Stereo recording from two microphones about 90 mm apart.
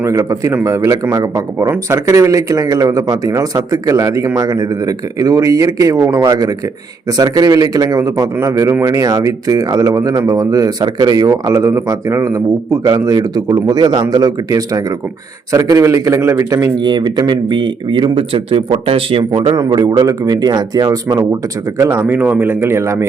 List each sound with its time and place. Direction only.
0.1 s speech: 35° right (ahead or behind)
16.7 s speech: 55° right (ahead or behind); by 19.5 s 75° right (ahead or behind)
19.5 s speech: 50° right (ahead or behind)
21.8 s speech: 30° right (ahead or behind)
22.0 s a man's voice: 20° right (ahead or behind)